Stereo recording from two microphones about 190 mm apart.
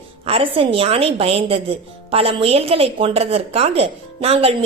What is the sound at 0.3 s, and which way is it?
A woman's voice, 30° right (ahead or behind).